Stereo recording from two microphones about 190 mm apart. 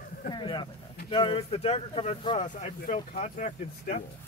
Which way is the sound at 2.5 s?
40° left (ahead or behind).